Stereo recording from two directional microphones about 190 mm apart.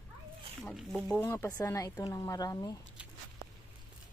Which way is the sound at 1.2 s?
10° left (ahead or behind).